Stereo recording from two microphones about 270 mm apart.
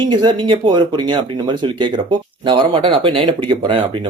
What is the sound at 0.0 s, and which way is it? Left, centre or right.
Speech, centre.